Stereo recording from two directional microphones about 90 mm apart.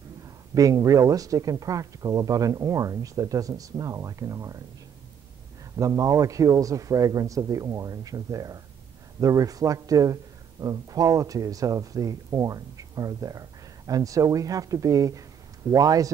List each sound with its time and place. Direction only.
0.2 s speech: 40° right (ahead or behind)
5.8 s speech: 40° right (ahead or behind)